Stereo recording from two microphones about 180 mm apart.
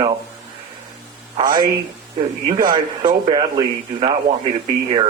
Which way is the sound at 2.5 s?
25° right (ahead or behind).